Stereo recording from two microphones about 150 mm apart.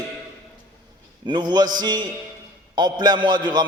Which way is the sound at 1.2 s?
30° right (ahead or behind).